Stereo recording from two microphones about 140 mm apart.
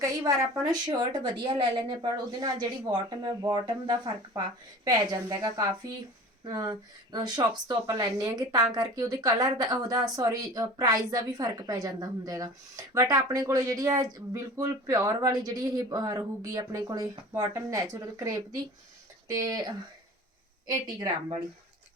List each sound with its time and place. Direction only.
0.0 s a woman's voice: 25° right (ahead or behind)
20.7 s a woman's voice: 30° right (ahead or behind)